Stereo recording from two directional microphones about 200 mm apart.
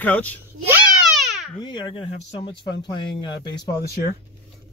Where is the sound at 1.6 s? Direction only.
25° left (ahead or behind).